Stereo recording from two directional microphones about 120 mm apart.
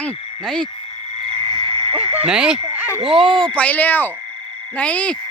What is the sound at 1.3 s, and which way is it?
Frog, 45° left (ahead or behind).